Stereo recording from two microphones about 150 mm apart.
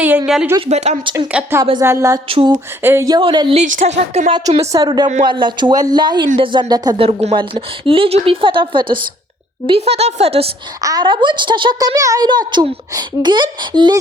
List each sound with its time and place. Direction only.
0.7 s a woman's voice: 50° right (ahead or behind)
1.3 s a woman's voice: 10° right (ahead or behind)
2.3 s speech: 35° right (ahead or behind)
2.8 s a woman's voice: 20° right (ahead or behind)
3.2 s speech: 35° right (ahead or behind)
3.6 s a woman's voice: 50° right (ahead or behind)
4.7 s a woman's voice: 25° right (ahead or behind)
6.9 s a woman's voice: 40° right (ahead or behind)
10.8 s a woman's voice: 25° right (ahead or behind)